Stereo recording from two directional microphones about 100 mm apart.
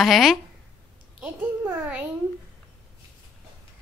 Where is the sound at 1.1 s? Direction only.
15° right (ahead or behind).